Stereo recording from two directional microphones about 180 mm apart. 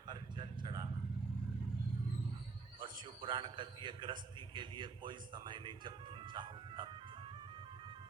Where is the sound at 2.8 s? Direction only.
25° right (ahead or behind).